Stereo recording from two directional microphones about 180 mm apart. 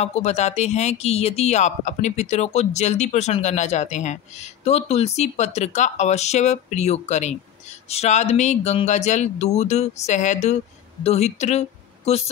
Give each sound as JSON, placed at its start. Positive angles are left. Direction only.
{"t": 0.0, "sound": "a woman's voice", "side_deg": 35}